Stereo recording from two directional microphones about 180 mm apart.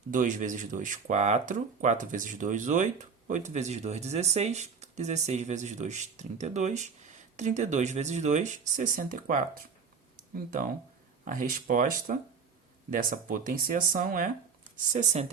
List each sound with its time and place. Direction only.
0.1 s speech: 45° right (ahead or behind)
14.9 s speech: 40° right (ahead or behind)